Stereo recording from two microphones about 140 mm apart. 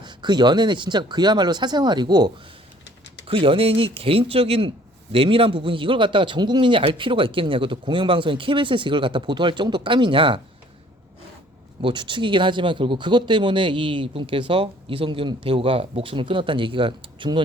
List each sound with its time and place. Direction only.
0.0 s speech: 35° right (ahead or behind)
11.8 s speech: 35° right (ahead or behind)